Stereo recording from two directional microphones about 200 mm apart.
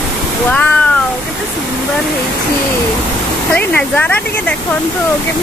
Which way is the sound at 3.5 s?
10° left (ahead or behind).